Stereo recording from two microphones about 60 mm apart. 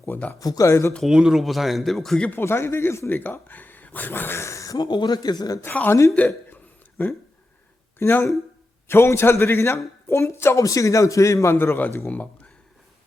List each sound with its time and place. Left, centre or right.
0.0 s speech: left
0.3 s a man's voice: left
0.7 s speech: left
1.0 s speech: centre
2.4 s speech: left
3.1 s speech: left
5.2 s a man's voice: left
5.6 s a man's voice: left
7.9 s speech: left
10.6 s a man's voice: left
11.5 s speech: left